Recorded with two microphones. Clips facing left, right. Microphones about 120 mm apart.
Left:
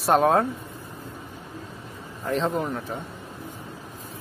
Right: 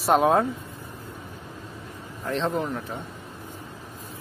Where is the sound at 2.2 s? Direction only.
5° left (ahead or behind).